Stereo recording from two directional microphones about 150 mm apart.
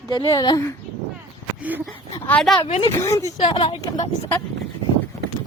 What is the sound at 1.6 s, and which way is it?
Speech, 10° right (ahead or behind).